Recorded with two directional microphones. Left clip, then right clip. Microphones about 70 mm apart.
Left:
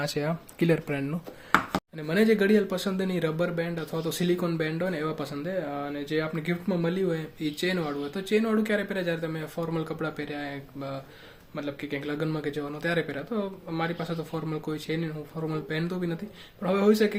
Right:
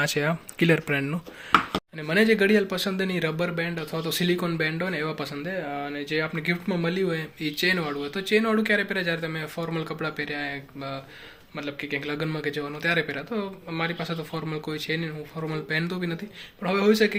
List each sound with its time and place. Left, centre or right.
0.0 s speech: centre
1.5 s speech: left
11.5 s a man's voice: left
13.8 s speech: left
16.6 s speech: left